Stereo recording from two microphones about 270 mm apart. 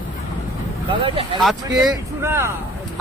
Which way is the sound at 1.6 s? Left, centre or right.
Centre.